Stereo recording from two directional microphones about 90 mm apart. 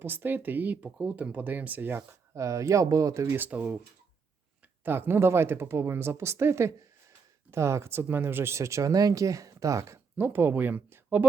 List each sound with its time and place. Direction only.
0.0 s speech: 25° right (ahead or behind)
2.0 s speech: 35° right (ahead or behind)
3.2 s speech: 20° right (ahead or behind)
4.8 s speech: 25° right (ahead or behind)
10.2 s speech: 25° right (ahead or behind)